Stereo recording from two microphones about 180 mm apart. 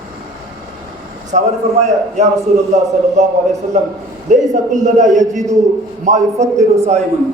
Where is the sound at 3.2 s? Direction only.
40° right (ahead or behind).